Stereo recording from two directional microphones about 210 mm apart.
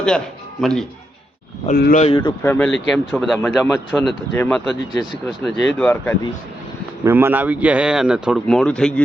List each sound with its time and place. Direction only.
0.6 s speech: centre (ahead or behind)
1.6 s speech: 40° left (ahead or behind)
2.0 s speech: 25° left (ahead or behind)
2.5 s speech: 5° left (ahead or behind)
7.0 s speech: 10° right (ahead or behind); by 9.0 s 5° left (ahead or behind)